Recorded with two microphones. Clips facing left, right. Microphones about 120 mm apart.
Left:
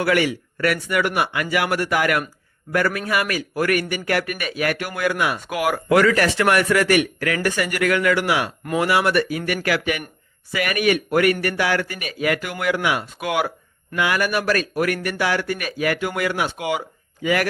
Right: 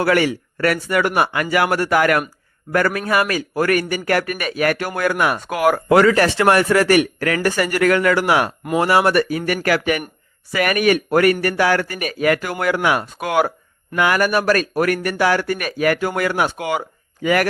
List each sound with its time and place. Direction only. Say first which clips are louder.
0.0 s a man's voice: right 3 dB; 40° right (ahead or behind)
5.9 s a man's voice: right 2 dB; 30° right (ahead or behind); by 17.5 s 50° right (ahead or behind)